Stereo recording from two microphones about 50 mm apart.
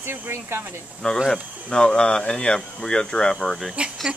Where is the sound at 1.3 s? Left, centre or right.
Centre.